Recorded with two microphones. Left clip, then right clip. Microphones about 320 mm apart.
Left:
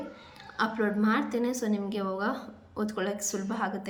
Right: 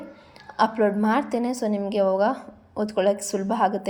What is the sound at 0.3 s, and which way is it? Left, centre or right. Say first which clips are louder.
A woman's voice: right 8 dB; centre.